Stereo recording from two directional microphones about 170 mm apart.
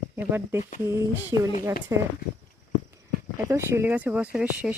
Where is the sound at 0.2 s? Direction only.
10° right (ahead or behind).